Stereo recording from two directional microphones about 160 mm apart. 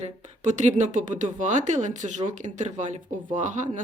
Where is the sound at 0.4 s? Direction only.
50° right (ahead or behind).